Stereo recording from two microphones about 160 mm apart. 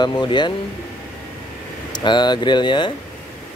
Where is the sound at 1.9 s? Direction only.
30° left (ahead or behind).